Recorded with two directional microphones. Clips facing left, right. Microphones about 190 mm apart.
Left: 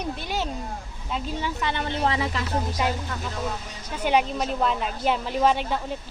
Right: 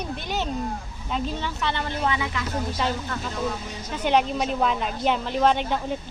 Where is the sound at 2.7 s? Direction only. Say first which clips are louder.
Even; 10° left (ahead or behind).